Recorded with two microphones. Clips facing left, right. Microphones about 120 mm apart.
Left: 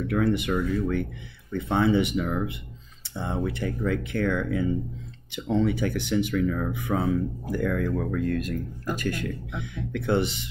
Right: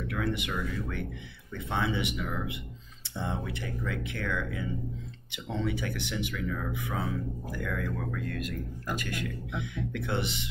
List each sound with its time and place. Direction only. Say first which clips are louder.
0.1 s speech: left 9 dB; 40° left (ahead or behind)